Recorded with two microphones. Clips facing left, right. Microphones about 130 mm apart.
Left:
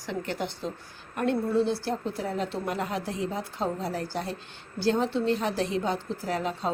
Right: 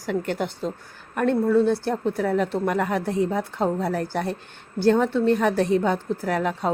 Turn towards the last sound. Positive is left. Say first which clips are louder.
# right 5 dB
turn(degrees=-60)  # may be behind; listen again after turning